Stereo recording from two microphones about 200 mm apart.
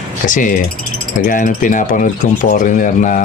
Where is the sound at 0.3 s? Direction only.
40° left (ahead or behind).